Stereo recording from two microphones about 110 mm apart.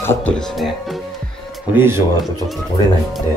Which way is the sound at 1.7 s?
20° right (ahead or behind).